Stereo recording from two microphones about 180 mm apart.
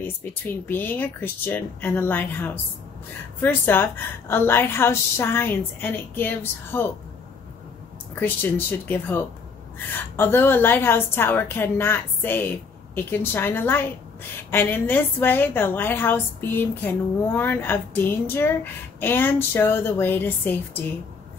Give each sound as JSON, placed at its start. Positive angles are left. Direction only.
{"t": 0.0, "sound": "a woman's voice", "side_deg": 10}
{"t": 8.1, "sound": "a woman's voice", "side_deg": 10}